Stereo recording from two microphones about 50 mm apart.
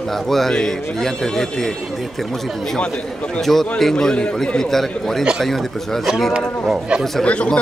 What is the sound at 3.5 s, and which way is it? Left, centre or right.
A man's voice, centre.